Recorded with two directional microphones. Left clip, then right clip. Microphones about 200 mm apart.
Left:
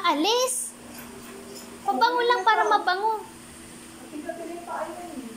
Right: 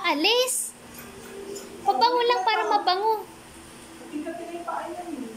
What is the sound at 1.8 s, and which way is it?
A child's voice, 5° right (ahead or behind).